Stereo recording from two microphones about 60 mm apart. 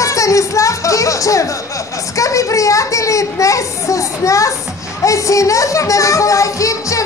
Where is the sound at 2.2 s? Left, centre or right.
Left.